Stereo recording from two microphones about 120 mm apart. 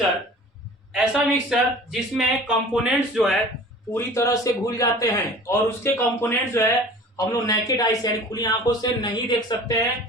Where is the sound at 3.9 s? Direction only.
25° left (ahead or behind).